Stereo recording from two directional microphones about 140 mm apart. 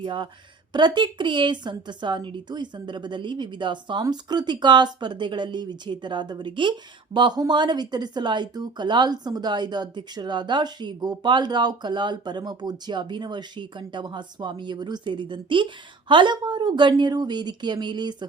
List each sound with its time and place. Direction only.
0.0 s a woman's voice: 35° right (ahead or behind)